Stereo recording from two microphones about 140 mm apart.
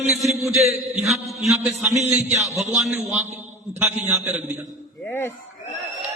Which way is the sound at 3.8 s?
10° right (ahead or behind).